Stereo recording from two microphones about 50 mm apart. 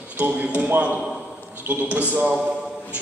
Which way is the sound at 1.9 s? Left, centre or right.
Right.